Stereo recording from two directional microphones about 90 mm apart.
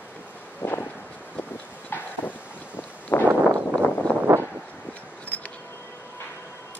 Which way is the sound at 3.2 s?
20° right (ahead or behind).